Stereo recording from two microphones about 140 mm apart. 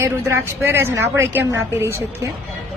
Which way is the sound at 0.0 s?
15° right (ahead or behind).